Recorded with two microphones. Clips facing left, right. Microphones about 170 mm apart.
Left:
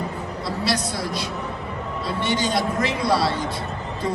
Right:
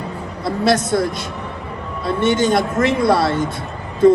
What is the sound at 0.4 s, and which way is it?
Speech, 50° right (ahead or behind).